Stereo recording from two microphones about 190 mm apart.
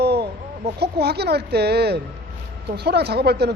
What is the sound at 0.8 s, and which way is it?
Speech, 60° right (ahead or behind).